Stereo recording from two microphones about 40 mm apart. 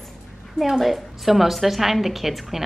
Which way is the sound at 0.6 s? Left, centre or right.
Centre.